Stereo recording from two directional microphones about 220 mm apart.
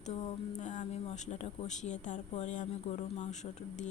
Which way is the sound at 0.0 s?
30° left (ahead or behind).